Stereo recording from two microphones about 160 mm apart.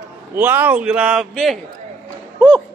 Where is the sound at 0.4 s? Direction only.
15° right (ahead or behind).